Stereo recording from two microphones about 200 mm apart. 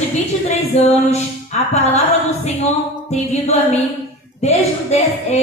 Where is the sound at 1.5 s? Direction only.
35° left (ahead or behind).